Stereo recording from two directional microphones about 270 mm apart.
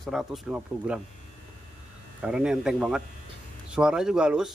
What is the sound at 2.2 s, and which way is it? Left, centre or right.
Speech, centre.